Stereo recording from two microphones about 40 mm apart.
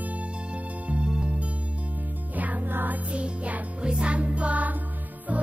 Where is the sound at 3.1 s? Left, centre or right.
Right.